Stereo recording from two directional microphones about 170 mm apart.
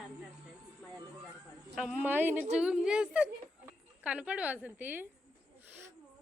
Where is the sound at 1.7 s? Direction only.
Centre (ahead or behind).